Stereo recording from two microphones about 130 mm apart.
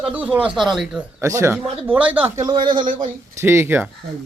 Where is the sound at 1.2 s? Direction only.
20° right (ahead or behind).